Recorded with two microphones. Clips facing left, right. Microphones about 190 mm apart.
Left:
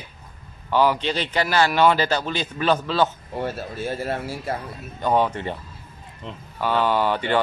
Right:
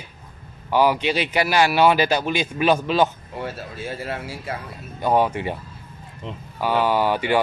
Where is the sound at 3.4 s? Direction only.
45° left (ahead or behind).